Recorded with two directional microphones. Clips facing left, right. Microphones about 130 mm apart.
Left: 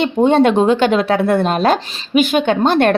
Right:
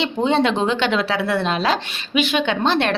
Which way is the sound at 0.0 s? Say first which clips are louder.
Left 6 dB; 50° left (ahead or behind).